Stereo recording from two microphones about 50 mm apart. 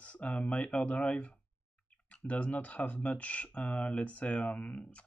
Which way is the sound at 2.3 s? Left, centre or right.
Left.